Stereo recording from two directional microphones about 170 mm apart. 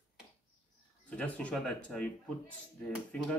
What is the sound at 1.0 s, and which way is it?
Speech, 5° left (ahead or behind).